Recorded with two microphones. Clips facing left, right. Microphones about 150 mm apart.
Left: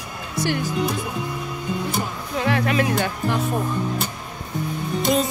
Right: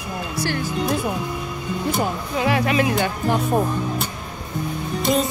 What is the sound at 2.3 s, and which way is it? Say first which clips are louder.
Music: even; 5° right (ahead or behind).